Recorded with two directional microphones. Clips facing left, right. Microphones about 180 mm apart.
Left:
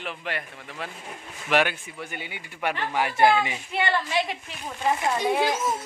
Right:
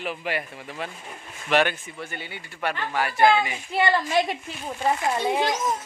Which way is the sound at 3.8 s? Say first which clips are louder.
Right 4 dB; 40° right (ahead or behind).